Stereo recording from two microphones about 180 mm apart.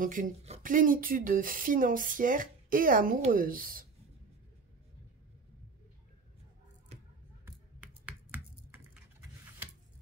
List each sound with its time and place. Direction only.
0.0 s speech: 45° right (ahead or behind)
7.4 s computer keyboard: 5° right (ahead or behind)